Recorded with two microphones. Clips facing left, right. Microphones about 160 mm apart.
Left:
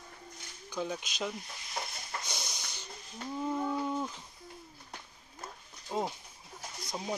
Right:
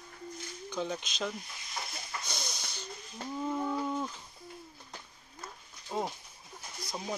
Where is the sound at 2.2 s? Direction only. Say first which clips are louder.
Right 1 dB; 15° left (ahead or behind).